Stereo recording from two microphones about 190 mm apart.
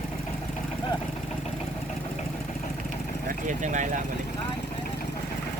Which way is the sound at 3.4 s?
40° right (ahead or behind).